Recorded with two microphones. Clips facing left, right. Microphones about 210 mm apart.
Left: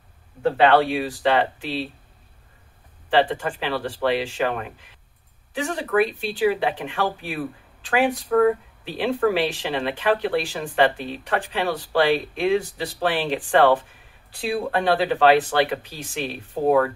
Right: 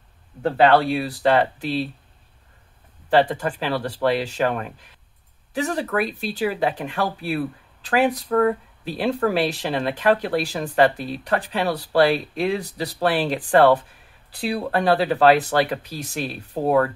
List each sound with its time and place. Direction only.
0.4 s speech: 40° right (ahead or behind)
3.1 s speech: 40° right (ahead or behind)